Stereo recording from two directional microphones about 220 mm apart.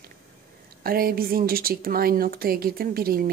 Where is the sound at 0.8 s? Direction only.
40° right (ahead or behind).